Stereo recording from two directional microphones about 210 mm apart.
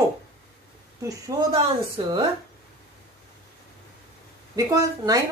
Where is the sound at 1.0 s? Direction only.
20° right (ahead or behind).